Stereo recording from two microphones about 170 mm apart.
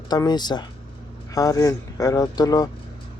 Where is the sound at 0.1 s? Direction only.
25° left (ahead or behind).